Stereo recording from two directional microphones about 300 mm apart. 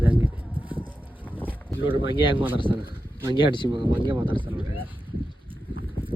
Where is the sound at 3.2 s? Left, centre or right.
Centre.